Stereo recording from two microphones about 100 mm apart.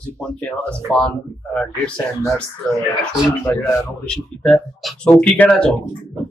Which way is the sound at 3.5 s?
20° left (ahead or behind).